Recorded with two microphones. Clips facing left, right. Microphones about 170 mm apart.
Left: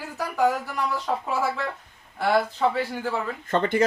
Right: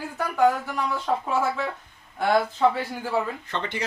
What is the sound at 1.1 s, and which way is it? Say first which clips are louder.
Speech: right 4 dB; centre (ahead or behind).